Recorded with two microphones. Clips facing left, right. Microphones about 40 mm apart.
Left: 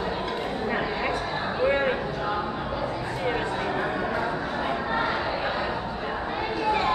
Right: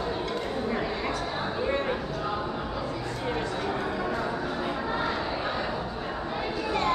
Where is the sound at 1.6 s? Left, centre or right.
Left.